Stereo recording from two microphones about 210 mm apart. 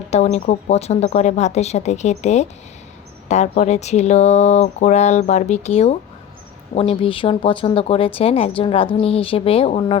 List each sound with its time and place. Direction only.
0.1 s speech: 30° left (ahead or behind)